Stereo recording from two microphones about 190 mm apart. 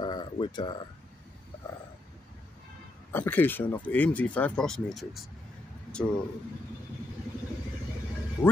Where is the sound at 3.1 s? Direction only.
10° left (ahead or behind).